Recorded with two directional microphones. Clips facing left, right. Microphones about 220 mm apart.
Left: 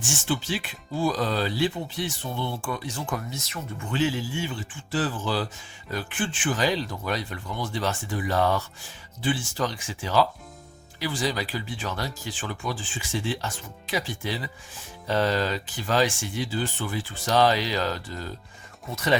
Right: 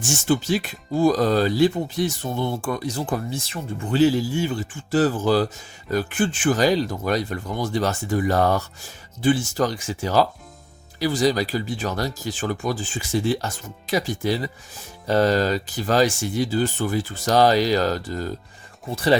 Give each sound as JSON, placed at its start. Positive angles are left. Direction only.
{"t": 0.0, "sound": "speech", "side_deg": -40}
{"t": 18.9, "sound": "speech", "side_deg": -30}